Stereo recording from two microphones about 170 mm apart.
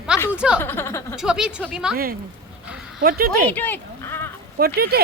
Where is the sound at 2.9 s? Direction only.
60° right (ahead or behind).